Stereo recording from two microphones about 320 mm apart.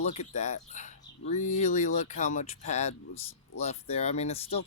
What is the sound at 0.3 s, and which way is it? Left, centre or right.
Speech, left.